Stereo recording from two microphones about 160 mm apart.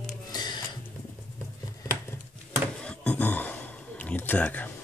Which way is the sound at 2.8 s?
10° left (ahead or behind).